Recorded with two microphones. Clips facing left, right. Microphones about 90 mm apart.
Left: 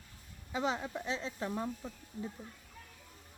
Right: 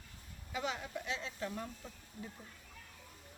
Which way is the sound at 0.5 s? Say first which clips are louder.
Left 5 dB; 30° left (ahead or behind).